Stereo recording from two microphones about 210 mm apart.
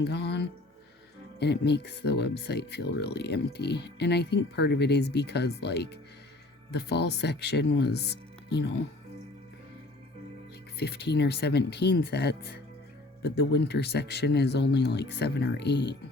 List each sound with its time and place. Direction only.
0.0 s speech: 55° left (ahead or behind)
10.8 s speech: 50° left (ahead or behind)